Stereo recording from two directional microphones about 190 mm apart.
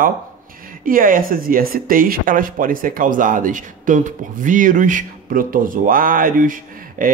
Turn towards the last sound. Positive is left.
turn(degrees=-45)  # may be behind; listen again after turning